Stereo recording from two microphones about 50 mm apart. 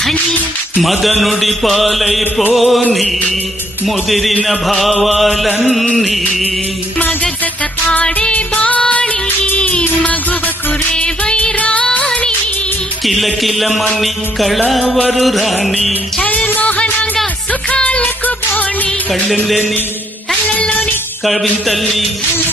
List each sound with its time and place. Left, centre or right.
0.0 s speech: centre
0.8 s music: centre
3.8 s music: centre
8.3 s music of bollywood: left
8.9 s music: left
9.6 s music of bollywood: left
10.9 s music of bollywood: centre
11.6 s music: left
11.9 s music of bollywood: left
13.1 s music: centre
16.2 s music: left
16.5 s music of bollywood: left
17.5 s music: left
20.5 s music: left